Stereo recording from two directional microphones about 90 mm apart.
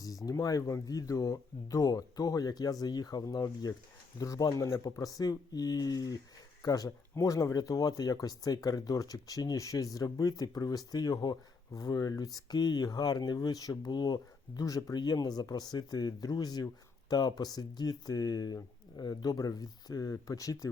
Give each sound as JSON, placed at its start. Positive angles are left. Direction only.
{"t": 0.3, "sound": "speech", "side_deg": 40}